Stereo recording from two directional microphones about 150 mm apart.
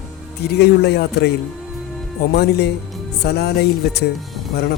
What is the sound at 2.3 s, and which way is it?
Speech, 90° left.